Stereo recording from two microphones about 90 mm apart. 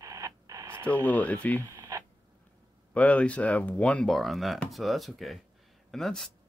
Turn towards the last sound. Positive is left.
turn(degrees=5)  # may be behind; listen again after turning